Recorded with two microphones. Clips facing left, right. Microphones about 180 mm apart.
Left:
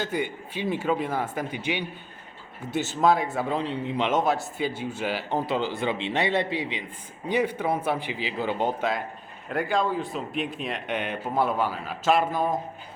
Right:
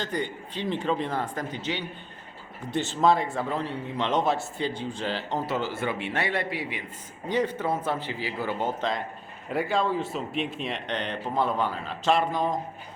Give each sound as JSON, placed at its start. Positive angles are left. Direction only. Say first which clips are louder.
{"t": 0.0, "sound": "a man's voice", "louder": "left 2 dB", "side_deg": 10}
{"t": 3.5, "sound": "speech", "louder": "left 3 dB", "side_deg": 15}
{"t": 4.2, "sound": "speech", "louder": "left 1 dB", "side_deg": 0}
{"t": 8.8, "sound": "a man's voice", "louder": "left 1 dB", "side_deg": 5}